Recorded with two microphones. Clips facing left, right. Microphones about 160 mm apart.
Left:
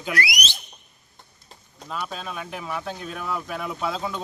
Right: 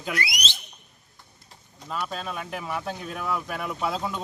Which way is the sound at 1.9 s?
Centre (ahead or behind).